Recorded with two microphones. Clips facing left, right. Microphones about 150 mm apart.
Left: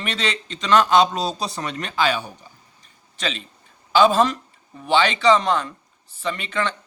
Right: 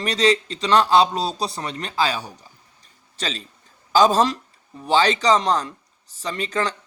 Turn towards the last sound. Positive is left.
turn(degrees=-35)  # may be behind; listen again after turning